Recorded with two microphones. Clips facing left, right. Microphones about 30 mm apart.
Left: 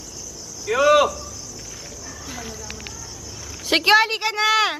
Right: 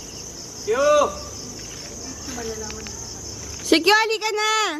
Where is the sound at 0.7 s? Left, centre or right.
Left.